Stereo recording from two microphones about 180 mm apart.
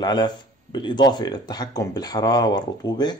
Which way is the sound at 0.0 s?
25° left (ahead or behind).